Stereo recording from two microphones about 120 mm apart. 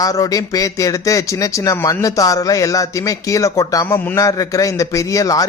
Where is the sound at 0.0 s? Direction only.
30° left (ahead or behind).